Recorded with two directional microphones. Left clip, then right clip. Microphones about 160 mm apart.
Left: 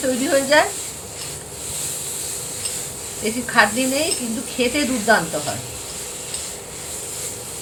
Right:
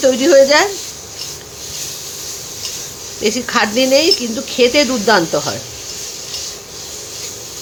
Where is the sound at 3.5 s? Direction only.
90° right.